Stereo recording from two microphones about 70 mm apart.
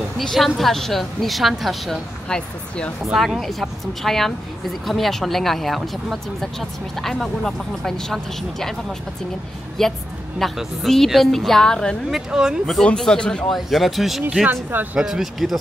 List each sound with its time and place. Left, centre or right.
0.2 s speech: centre
2.2 s speech: centre
3.0 s speech: centre
9.8 s speech: centre
12.1 s speech: centre
12.8 s speech: centre
13.5 s speech: centre
14.5 s speech: right
15.0 s speech: centre